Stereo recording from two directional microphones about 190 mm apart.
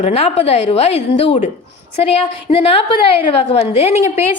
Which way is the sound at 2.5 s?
35° left (ahead or behind).